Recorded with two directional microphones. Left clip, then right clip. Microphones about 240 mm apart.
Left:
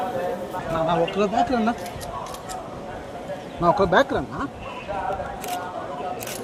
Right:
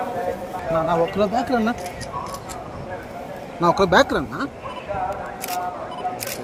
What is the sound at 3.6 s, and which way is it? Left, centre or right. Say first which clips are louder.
Speech: right 2 dB; centre.